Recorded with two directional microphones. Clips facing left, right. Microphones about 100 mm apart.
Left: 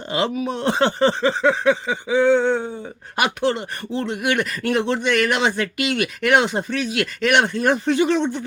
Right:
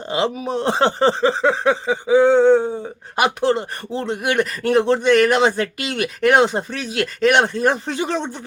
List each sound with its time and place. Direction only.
0.1 s speech: 30° right (ahead or behind)